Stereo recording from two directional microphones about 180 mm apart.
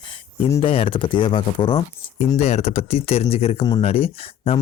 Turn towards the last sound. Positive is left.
turn(degrees=35)  # may be behind; listen again after turning